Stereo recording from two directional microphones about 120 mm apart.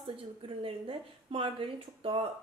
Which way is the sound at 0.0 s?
45° right (ahead or behind).